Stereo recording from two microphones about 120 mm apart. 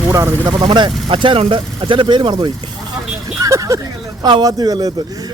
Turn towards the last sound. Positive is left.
turn(degrees=-30)  # may be behind; listen again after turning